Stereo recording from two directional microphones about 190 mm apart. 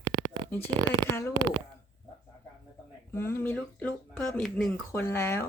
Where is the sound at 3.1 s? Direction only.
10° left (ahead or behind).